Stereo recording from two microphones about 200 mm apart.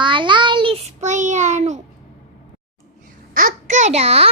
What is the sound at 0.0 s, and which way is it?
Child singing, 25° right (ahead or behind).